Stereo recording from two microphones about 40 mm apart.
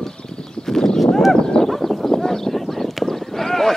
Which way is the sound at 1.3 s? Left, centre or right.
Centre.